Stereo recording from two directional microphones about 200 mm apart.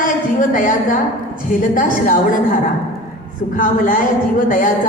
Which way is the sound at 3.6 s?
45° left (ahead or behind).